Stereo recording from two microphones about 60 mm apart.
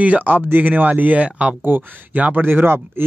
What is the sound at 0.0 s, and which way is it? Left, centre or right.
Speech, right.